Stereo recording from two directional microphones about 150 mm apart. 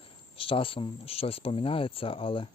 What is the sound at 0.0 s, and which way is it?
Speech, 35° left (ahead or behind).